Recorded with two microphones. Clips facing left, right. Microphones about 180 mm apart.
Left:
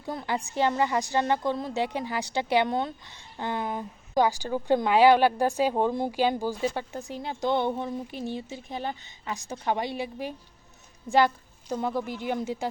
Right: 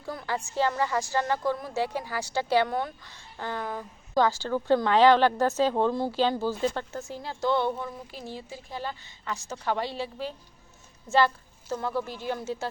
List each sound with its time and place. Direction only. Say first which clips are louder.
0.0 s a woman's voice: left 2 dB; 20° left (ahead or behind)
11.7 s speech: left 1 dB; 20° left (ahead or behind)